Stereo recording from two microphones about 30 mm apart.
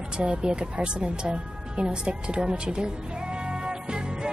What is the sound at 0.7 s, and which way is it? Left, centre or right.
A woman's voice, right.